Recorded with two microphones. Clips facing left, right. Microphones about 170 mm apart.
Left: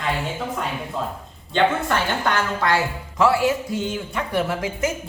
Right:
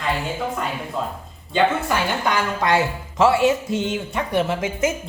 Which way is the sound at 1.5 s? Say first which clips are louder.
Even; 10° right (ahead or behind).